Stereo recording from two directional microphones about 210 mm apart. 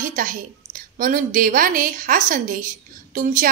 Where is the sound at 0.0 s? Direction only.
40° right (ahead or behind).